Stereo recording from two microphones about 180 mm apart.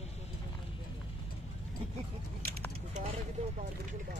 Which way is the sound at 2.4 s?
60° right (ahead or behind).